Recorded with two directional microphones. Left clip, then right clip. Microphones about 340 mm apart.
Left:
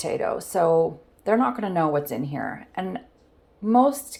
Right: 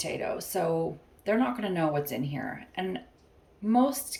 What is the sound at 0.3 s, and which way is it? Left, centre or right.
Speech, centre.